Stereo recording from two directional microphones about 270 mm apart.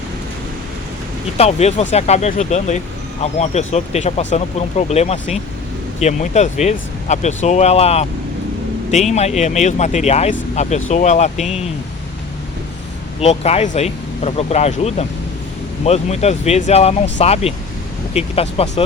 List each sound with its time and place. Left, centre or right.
1.4 s speech: left
13.1 s speech: left